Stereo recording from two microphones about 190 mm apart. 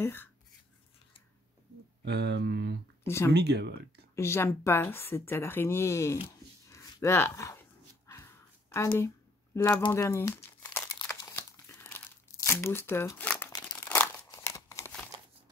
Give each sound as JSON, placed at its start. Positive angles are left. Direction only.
{"t": 0.0, "sound": "a woman's voice", "side_deg": 10}
{"t": 2.0, "sound": "speech", "side_deg": -65}
{"t": 4.1, "sound": "a woman's voice", "side_deg": 15}
{"t": 6.7, "sound": "a sound", "side_deg": 15}
{"t": 9.9, "sound": "crumpling", "side_deg": 15}